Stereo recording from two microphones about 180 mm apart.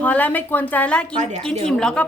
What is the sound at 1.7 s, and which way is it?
Speech, 5° left (ahead or behind).